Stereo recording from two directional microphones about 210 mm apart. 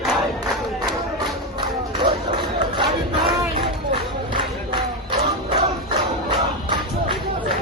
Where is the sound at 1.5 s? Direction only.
20° right (ahead or behind).